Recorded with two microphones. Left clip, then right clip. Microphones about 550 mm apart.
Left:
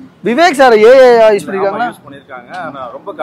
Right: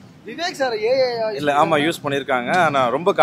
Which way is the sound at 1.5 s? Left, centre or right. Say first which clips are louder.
Left 2 dB; right.